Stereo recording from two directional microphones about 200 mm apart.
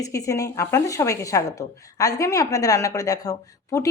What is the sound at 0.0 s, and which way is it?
A woman's voice, 15° left (ahead or behind).